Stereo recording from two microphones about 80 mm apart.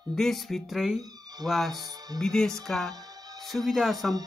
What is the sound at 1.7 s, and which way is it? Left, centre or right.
Speech, right.